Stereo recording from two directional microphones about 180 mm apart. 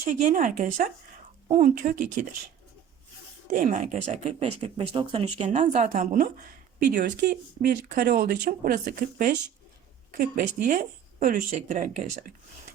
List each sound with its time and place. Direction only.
0.0 s a woman's voice: 45° right (ahead or behind)
3.5 s speech: 45° right (ahead or behind)
6.9 s a woman's voice: 60° right (ahead or behind); by 12.2 s 45° right (ahead or behind)